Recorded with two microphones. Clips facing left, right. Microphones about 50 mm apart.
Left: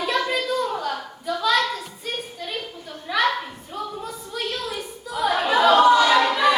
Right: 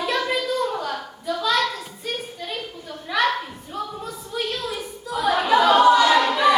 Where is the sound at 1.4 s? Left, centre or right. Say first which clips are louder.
Left 1 dB; centre.